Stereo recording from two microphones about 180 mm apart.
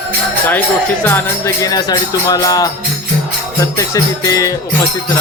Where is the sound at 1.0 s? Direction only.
15° left (ahead or behind).